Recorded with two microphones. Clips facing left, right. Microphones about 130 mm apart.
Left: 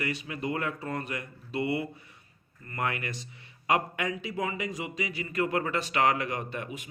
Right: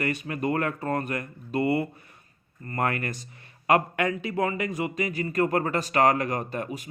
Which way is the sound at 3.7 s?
55° right (ahead or behind).